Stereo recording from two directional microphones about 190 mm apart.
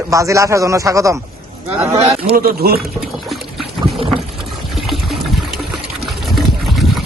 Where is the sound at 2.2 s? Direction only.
50° right (ahead or behind).